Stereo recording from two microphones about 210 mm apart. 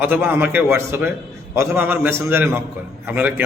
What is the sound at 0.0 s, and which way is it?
A man's voice, 10° right (ahead or behind).